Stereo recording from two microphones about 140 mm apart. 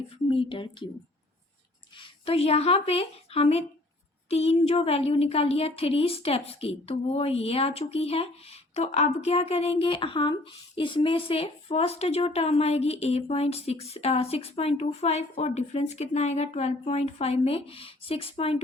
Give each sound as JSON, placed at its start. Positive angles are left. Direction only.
{"t": 0.3, "sound": "speech", "side_deg": 40}
{"t": 2.0, "sound": "a woman's voice", "side_deg": 45}